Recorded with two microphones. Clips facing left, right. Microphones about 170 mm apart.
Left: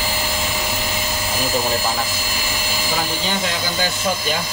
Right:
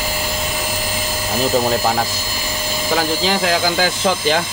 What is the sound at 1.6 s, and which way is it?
Speech, 50° right (ahead or behind).